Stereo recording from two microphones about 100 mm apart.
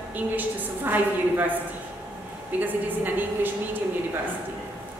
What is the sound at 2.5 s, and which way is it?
Speech, 20° right (ahead or behind).